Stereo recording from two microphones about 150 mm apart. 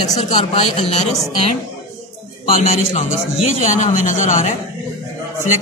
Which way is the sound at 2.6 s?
45° left (ahead or behind).